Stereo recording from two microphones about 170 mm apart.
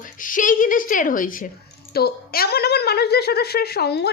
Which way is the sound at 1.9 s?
65° left (ahead or behind).